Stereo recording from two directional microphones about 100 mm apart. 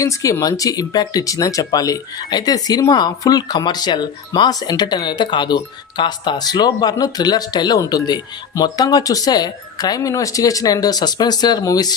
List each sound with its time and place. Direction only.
0.0 s speech: 35° left (ahead or behind)